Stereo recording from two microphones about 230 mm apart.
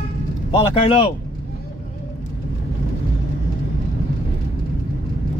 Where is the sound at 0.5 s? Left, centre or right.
Left.